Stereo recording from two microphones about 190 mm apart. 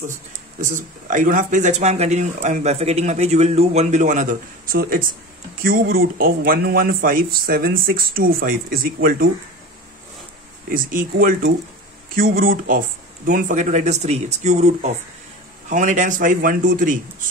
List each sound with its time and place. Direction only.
0.6 s speech: 45° right (ahead or behind)
10.7 s speech: 45° right (ahead or behind)